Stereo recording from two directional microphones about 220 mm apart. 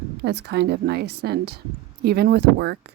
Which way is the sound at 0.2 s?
50° right (ahead or behind).